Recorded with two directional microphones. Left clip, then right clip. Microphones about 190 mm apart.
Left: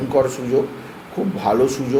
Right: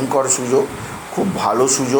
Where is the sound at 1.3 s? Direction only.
Centre (ahead or behind).